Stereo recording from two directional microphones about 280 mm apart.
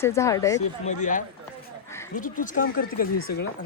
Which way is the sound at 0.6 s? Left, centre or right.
Left.